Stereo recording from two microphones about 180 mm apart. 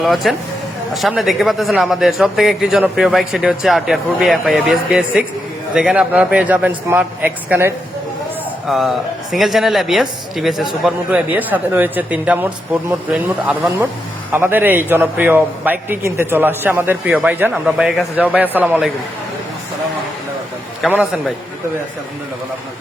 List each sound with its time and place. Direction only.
0.0 s a man's voice: centre (ahead or behind)
20.8 s speech: 5° right (ahead or behind)